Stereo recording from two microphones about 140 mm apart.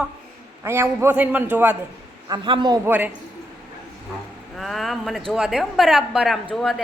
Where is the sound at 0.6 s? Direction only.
20° right (ahead or behind).